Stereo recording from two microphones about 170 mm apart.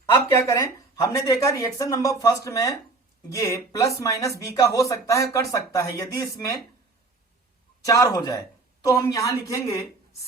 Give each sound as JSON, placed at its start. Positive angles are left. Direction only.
{"t": 0.1, "sound": "speech", "side_deg": 20}
{"t": 7.9, "sound": "speech", "side_deg": 20}